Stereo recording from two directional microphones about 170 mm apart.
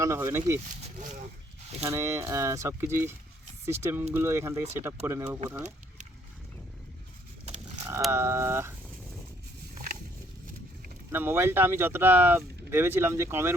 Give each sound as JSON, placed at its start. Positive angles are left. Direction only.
{"t": 0.0, "sound": "speech", "side_deg": -15}
{"t": 1.9, "sound": "speech", "side_deg": -15}
{"t": 8.1, "sound": "speech", "side_deg": -15}
{"t": 11.1, "sound": "speech", "side_deg": -10}